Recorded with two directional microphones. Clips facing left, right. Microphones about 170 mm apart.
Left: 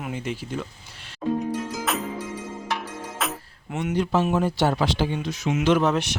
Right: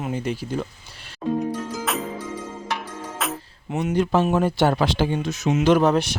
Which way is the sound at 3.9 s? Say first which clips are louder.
Right 2 dB; 50° right (ahead or behind).